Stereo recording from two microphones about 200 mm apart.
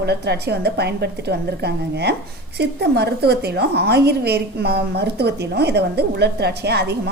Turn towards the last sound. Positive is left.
turn(degrees=-55)  # may be behind; listen again after turning